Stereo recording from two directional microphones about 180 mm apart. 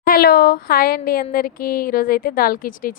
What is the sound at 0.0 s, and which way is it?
A woman's voice, 55° left (ahead or behind).